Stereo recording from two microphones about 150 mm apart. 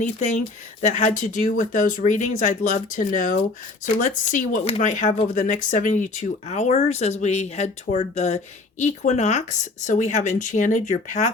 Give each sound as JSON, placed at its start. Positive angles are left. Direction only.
{"t": 0.0, "sound": "speech", "side_deg": 55}